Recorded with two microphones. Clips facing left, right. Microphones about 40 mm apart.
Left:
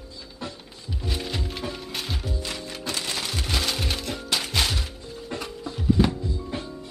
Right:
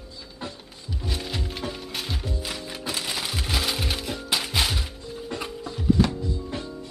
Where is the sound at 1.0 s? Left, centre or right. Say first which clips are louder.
Left 1 dB; centre.